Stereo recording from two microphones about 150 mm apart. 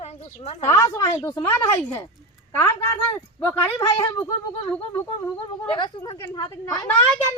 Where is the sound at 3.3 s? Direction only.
15° left (ahead or behind).